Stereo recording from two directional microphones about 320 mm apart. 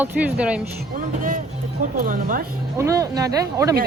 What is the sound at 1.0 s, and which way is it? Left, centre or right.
Speech, right.